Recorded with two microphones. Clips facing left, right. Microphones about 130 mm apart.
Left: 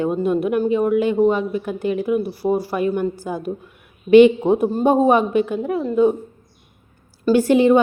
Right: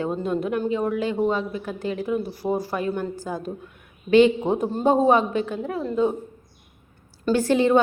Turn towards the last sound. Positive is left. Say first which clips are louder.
# left 5 dB
turn(degrees=15)  # may be behind; listen again after turning